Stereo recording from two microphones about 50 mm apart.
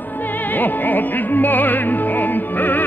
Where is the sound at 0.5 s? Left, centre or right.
Left.